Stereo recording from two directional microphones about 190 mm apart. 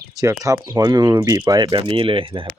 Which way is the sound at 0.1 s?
15° right (ahead or behind).